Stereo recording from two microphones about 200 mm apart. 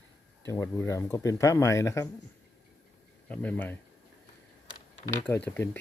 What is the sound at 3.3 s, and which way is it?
Speech, 10° left (ahead or behind).